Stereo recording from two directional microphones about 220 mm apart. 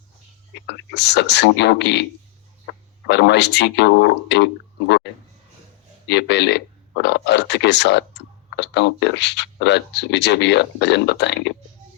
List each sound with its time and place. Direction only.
0.7 s speech: 50° left (ahead or behind)
3.1 s speech: 50° left (ahead or behind)
6.1 s speech: 50° left (ahead or behind)